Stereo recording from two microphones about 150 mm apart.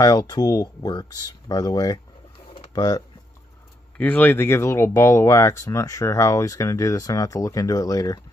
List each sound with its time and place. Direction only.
0.0 s speech: 25° left (ahead or behind)
4.0 s speech: 10° left (ahead or behind)